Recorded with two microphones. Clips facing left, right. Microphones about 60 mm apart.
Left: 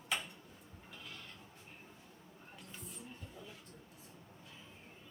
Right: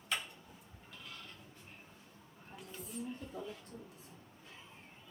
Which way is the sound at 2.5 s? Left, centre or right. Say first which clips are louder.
Right 8 dB; centre.